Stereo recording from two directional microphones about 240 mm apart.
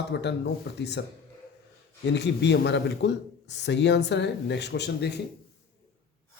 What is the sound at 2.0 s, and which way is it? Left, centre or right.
Speech, left.